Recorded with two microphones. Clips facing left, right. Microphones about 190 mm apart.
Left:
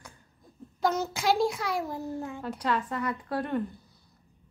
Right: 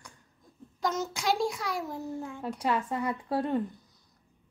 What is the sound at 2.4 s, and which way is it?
A woman's voice, 25° right (ahead or behind).